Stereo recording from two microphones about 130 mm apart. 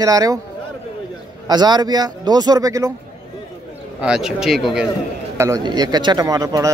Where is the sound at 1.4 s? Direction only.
35° right (ahead or behind).